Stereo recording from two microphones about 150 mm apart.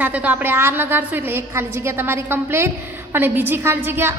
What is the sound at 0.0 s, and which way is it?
A woman's voice, 10° right (ahead or behind).